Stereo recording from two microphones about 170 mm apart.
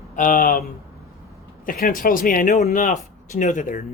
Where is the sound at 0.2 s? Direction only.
50° left (ahead or behind).